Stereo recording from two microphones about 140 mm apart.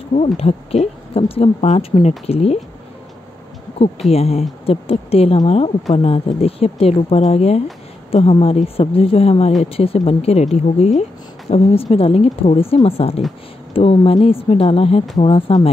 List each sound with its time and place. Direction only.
0.1 s speech: 50° left (ahead or behind)
4.1 s speech: 45° left (ahead or behind)